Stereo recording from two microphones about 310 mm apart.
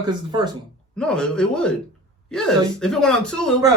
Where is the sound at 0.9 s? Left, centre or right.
Centre.